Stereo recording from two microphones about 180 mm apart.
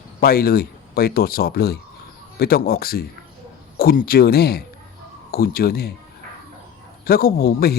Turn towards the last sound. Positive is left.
turn(degrees=55)  # may be behind; listen again after turning